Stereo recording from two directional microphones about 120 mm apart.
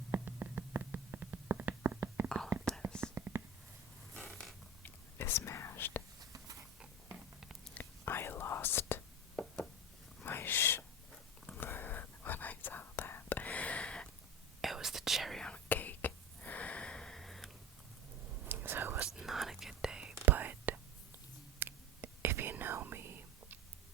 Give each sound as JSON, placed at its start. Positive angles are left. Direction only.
{"t": 0.1, "sound": "a sound", "side_deg": -15}
{"t": 3.0, "sound": "whispering", "side_deg": -20}
{"t": 4.1, "sound": "zipper", "side_deg": 10}
{"t": 4.8, "sound": "whispering", "side_deg": 20}
{"t": 6.7, "sound": "a sound", "side_deg": -10}
{"t": 7.7, "sound": "whispering", "side_deg": 15}
{"t": 14.6, "sound": "whispering", "side_deg": 0}
{"t": 18.4, "sound": "whispering", "side_deg": -15}
{"t": 19.1, "sound": "whispering", "side_deg": -5}